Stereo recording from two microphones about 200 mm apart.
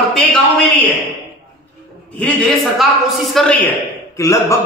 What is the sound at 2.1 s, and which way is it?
A man's voice, 5° left (ahead or behind).